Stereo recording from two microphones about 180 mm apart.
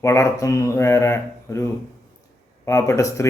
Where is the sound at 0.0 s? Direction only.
15° left (ahead or behind).